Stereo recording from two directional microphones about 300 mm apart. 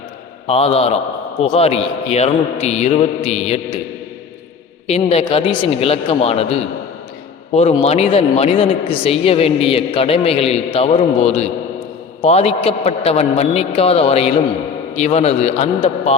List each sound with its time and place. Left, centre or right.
0.4 s a man's voice: centre
4.9 s a man's voice: centre